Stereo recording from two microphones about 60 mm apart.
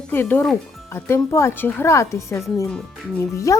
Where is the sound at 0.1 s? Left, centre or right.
Left.